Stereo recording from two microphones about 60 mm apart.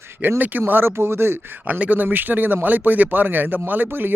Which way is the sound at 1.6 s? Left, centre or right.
Right.